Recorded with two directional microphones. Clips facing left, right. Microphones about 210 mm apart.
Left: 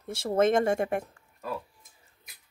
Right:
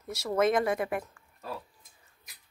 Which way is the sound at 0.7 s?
45° left (ahead or behind).